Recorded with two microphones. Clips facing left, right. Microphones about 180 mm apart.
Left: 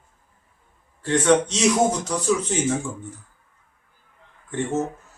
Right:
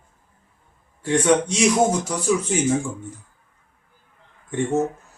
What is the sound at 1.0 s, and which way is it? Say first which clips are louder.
A man's voice: even; 10° right (ahead or behind).